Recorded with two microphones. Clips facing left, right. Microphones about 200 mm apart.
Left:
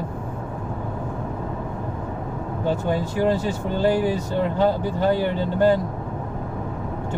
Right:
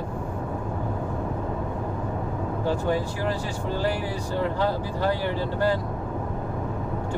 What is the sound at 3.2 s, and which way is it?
Speech, 20° left (ahead or behind).